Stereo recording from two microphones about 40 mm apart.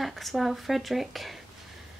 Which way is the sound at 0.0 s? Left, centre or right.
Centre.